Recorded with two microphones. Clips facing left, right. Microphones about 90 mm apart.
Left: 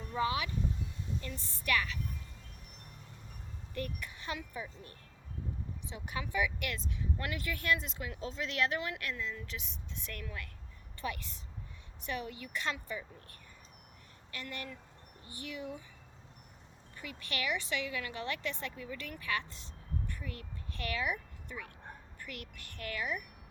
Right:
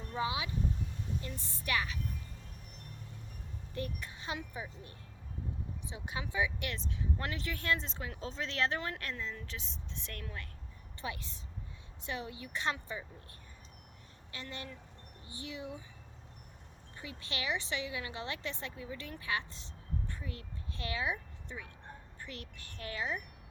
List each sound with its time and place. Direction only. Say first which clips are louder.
0.2 s a woman's voice: left 2 dB; 20° right (ahead or behind)
3.8 s a woman's voice: even; 20° right (ahead or behind)
14.3 s a woman's voice: left 2 dB; 20° right (ahead or behind)
17.0 s a woman's voice: left 2 dB; 20° right (ahead or behind)
20.1 s a sound: even; 25° right (ahead or behind)
22.2 s a woman's voice: left 1 dB; 25° right (ahead or behind)